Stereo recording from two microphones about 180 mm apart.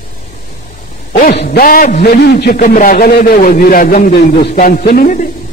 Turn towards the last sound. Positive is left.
turn(degrees=50)  # may be behind; listen again after turning